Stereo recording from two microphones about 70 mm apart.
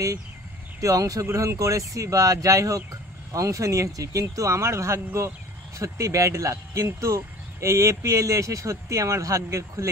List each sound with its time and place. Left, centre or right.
0.7 s speech: right